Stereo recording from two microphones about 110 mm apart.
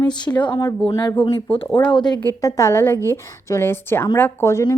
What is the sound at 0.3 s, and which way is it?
Speech, 45° left (ahead or behind).